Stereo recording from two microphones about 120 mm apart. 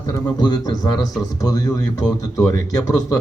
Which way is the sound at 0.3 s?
35° left (ahead or behind).